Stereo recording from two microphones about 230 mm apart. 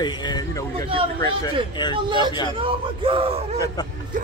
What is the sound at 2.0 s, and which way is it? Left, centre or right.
Speech, centre.